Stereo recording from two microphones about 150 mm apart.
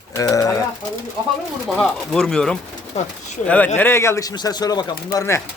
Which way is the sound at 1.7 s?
5° left (ahead or behind).